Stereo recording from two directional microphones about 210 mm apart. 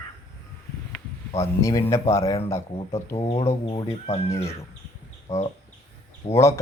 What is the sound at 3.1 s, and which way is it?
Speech, 25° left (ahead or behind).